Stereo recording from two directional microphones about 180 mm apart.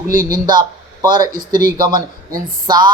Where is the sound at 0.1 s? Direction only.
50° right (ahead or behind).